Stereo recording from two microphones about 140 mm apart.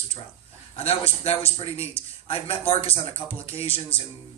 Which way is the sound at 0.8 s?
45° left (ahead or behind).